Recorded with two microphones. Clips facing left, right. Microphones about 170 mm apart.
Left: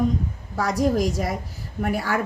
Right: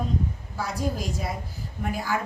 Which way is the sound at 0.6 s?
85° left.